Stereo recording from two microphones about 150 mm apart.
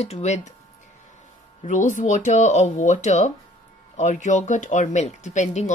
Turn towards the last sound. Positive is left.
turn(degrees=55)  # may be behind; listen again after turning